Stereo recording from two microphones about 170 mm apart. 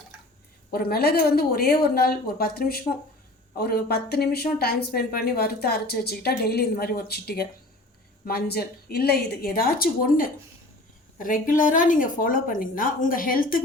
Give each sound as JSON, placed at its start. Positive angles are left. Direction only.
{"t": 0.7, "sound": "a woman's voice", "side_deg": 65}